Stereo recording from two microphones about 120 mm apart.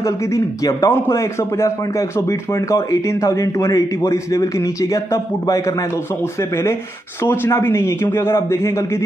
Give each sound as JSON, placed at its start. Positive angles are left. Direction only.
{"t": 0.7, "sound": "a man's voice", "side_deg": 25}
{"t": 7.2, "sound": "a man's voice", "side_deg": 20}